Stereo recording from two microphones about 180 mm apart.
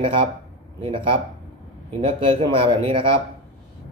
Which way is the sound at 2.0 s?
30° right (ahead or behind).